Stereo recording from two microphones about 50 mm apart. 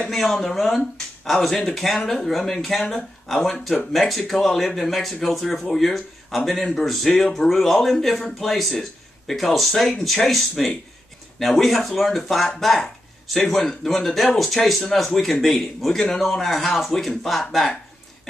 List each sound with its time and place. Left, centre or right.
0.0 s speech: centre